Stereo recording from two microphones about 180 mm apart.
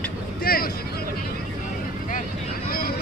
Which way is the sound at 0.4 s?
55° left (ahead or behind).